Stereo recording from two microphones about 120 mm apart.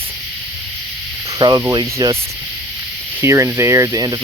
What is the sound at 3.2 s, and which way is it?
Speech, 25° right (ahead or behind).